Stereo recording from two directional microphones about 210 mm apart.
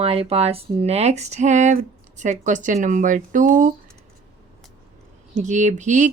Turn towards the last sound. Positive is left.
turn(degrees=-35)  # may be behind; listen again after turning